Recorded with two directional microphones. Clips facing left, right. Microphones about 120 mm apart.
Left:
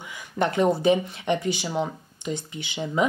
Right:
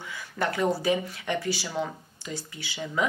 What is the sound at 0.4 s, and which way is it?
Speech, 20° left (ahead or behind).